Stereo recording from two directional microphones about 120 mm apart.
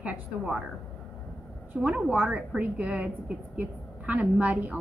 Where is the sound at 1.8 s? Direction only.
10° right (ahead or behind).